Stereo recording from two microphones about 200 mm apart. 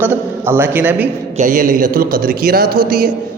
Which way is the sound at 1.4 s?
40° right (ahead or behind).